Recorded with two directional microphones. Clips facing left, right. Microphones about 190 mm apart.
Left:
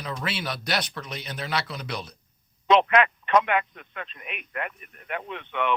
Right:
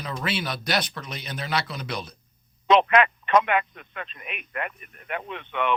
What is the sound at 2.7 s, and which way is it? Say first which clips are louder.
Speech: right 1 dB; 15° right (ahead or behind).